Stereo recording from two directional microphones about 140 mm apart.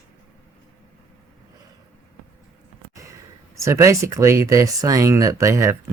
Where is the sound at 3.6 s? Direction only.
20° right (ahead or behind).